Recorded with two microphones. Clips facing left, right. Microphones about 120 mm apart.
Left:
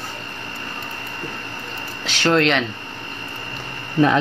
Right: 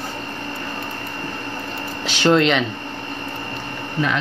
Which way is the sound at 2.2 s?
5° right (ahead or behind).